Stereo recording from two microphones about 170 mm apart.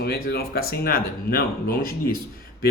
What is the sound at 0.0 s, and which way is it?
Speech, 70° left (ahead or behind).